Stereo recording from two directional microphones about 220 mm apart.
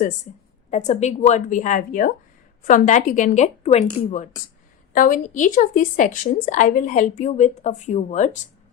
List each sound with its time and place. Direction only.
0.7 s a woman's voice: 30° left (ahead or behind)